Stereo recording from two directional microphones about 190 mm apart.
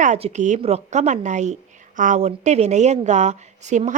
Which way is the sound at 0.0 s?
35° right (ahead or behind).